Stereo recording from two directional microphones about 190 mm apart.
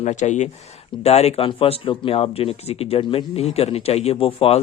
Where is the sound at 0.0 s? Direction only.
40° left (ahead or behind).